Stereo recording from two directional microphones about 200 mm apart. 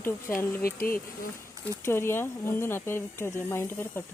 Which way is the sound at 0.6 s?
45° left (ahead or behind).